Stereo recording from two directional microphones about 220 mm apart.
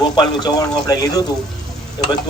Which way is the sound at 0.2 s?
20° left (ahead or behind).